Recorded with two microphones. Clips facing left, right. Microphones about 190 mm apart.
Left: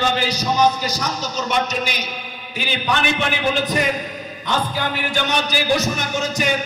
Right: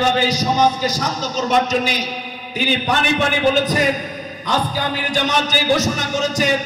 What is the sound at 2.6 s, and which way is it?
Music, 40° right (ahead or behind).